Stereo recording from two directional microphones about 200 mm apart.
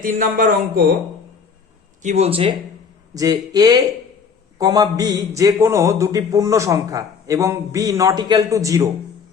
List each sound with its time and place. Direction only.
0.0 s speech: 45° right (ahead or behind)
2.0 s speech: 35° right (ahead or behind)
3.2 s a man's voice: 20° right (ahead or behind)